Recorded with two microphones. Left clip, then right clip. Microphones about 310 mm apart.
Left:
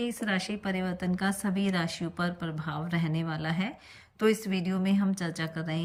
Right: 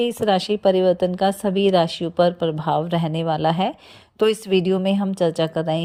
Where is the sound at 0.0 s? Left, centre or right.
Centre.